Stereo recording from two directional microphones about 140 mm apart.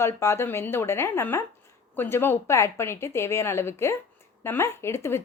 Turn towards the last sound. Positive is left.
turn(degrees=20)  # may be behind; listen again after turning